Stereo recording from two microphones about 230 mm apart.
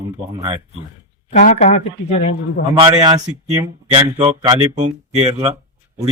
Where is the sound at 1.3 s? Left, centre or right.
Left.